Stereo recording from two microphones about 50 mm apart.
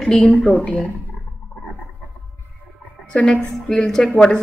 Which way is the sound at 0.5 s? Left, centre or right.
Left.